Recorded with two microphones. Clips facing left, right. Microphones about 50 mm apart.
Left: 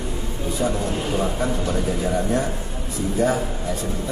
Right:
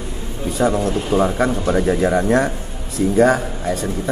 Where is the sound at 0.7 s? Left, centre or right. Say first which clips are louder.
Right 7 dB; right.